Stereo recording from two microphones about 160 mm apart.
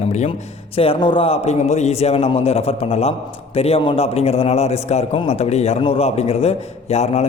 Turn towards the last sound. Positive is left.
turn(degrees=40)  # may be behind; listen again after turning